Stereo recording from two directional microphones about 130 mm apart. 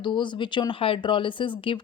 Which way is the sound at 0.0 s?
35° left (ahead or behind).